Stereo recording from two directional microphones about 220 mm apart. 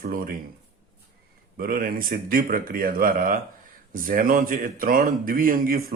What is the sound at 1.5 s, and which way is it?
Speech, 40° right (ahead or behind).